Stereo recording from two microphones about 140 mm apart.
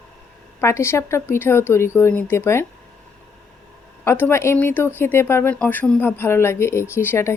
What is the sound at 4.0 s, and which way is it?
A woman's voice, 15° left (ahead or behind).